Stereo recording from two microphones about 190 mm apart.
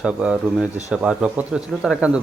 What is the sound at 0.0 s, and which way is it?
Speech, 5° right (ahead or behind).